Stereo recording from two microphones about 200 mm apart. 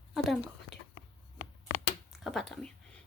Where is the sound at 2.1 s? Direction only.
Centre (ahead or behind).